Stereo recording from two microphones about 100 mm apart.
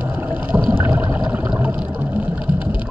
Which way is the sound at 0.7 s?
20° right (ahead or behind).